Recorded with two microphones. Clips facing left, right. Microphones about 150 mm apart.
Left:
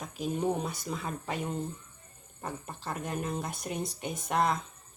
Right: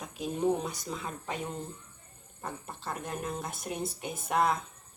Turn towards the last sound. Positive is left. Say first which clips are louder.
# even
turn(degrees=-5)  # may be behind; listen again after turning